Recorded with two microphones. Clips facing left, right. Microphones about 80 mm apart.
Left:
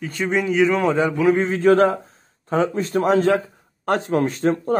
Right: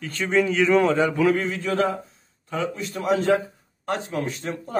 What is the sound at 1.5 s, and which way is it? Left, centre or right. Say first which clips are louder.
A man's voice: left 8 dB; left.